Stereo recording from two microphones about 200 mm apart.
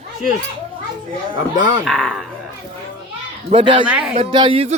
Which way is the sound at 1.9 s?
5° left (ahead or behind).